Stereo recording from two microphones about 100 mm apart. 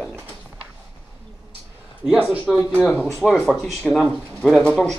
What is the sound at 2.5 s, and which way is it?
Speech, 5° right (ahead or behind).